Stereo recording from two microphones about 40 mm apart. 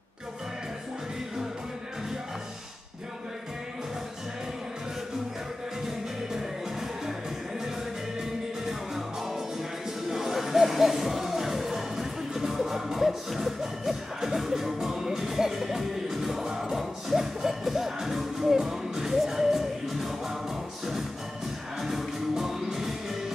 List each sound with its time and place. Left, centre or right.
8.2 s music: centre
21.8 s music: centre